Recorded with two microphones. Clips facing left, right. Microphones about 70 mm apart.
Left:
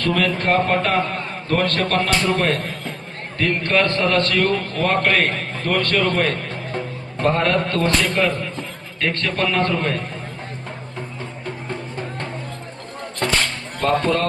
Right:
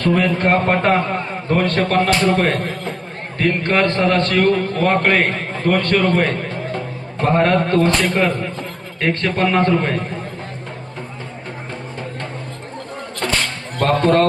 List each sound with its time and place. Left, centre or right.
0.0 s a man's voice: right
1.5 s a man's voice: centre
13.7 s speech: right